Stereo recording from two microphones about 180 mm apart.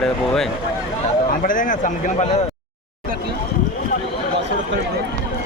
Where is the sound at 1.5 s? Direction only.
45° left (ahead or behind).